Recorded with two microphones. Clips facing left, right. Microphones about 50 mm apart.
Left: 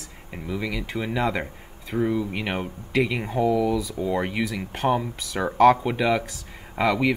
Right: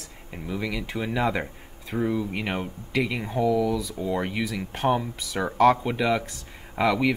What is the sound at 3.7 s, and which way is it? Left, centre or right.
Speech, centre.